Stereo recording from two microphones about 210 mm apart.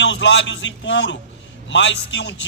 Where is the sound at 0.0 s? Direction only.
60° left (ahead or behind).